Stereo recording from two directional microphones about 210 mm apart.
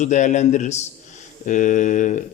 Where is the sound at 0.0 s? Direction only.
35° left (ahead or behind).